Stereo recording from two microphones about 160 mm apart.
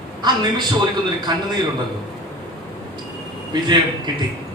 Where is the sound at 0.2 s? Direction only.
25° right (ahead or behind).